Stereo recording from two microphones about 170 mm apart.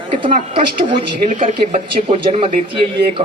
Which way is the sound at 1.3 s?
45° right (ahead or behind).